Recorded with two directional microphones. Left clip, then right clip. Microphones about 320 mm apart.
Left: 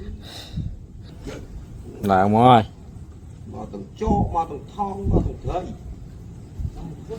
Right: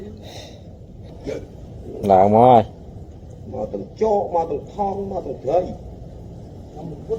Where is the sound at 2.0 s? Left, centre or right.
Left.